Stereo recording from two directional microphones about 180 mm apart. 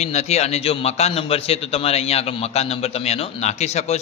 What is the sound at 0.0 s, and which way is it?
A man's voice, 40° left (ahead or behind).